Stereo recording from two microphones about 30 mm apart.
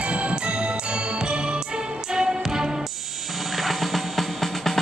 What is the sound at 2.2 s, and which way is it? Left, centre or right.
Music, right.